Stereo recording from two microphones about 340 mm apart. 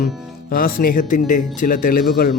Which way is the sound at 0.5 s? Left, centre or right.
Left.